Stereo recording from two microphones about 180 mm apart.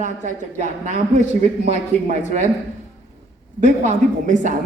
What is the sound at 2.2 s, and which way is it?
Speech, 40° right (ahead or behind).